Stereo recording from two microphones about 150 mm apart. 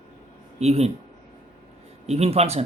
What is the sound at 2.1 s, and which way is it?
Speech, 45° right (ahead or behind).